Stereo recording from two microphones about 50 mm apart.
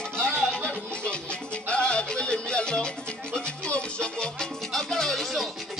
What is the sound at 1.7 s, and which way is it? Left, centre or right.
Music, centre.